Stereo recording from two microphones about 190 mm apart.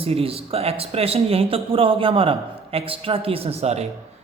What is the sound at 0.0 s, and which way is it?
Speech, 30° right (ahead or behind).